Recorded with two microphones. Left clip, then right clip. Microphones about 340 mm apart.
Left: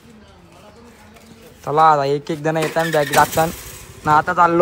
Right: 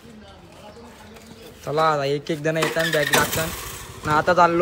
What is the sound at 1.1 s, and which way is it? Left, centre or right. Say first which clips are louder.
Speech: right 1 dB; centre.